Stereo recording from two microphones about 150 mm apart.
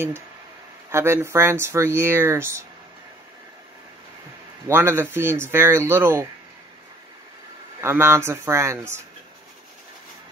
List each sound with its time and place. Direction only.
0.9 s speech: 15° right (ahead or behind)
4.6 s speech: 15° right (ahead or behind)
7.8 s speech: 15° right (ahead or behind)